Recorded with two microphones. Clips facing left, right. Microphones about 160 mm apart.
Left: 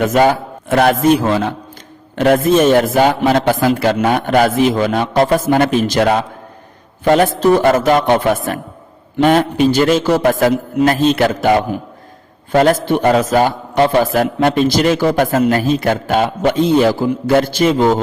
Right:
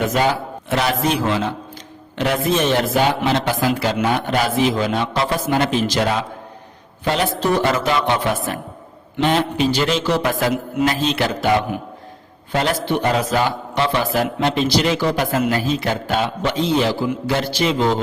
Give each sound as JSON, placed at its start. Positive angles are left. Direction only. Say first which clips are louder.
{"t": 0.0, "sound": "a man's voice", "louder": "left 6 dB", "side_deg": 50}